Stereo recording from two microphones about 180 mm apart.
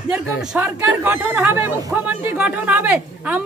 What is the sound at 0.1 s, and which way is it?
A man's voice, 5° right (ahead or behind).